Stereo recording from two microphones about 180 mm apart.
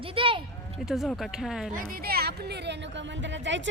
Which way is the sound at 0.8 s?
Centre (ahead or behind).